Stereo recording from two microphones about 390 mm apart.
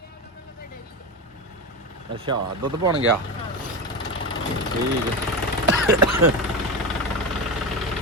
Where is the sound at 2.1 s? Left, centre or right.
Centre.